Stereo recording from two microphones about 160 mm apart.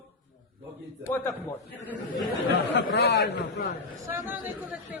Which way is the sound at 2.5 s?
90° left.